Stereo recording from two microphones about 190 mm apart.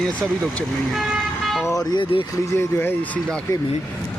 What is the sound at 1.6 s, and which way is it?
Speech, 20° left (ahead or behind).